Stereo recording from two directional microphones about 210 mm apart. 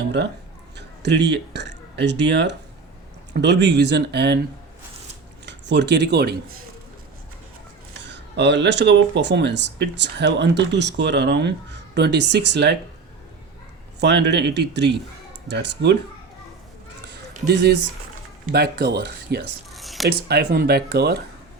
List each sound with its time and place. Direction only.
0.8 s speech: 55° right (ahead or behind)
5.5 s speech: 55° right (ahead or behind)
7.9 s speech: 55° right (ahead or behind)
14.0 s speech: 55° right (ahead or behind)
17.5 s speech: 50° right (ahead or behind)
19.7 s a sound: centre (ahead or behind)
20.1 s speech: 50° right (ahead or behind)